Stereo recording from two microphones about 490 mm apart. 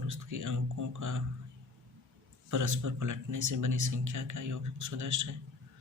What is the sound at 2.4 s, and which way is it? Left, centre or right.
Speech, right.